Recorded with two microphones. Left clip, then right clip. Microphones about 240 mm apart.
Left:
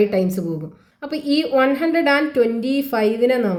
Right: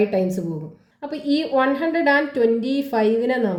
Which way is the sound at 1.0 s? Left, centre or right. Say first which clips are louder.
Left 2 dB; left.